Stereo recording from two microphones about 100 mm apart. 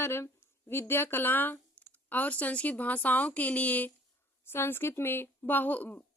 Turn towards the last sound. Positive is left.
turn(degrees=15)  # may be behind; listen again after turning